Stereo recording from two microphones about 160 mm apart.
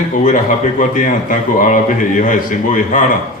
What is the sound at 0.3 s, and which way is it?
A man's voice, 55° left (ahead or behind).